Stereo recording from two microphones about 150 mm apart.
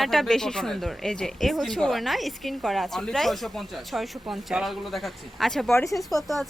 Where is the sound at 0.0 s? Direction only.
Centre (ahead or behind).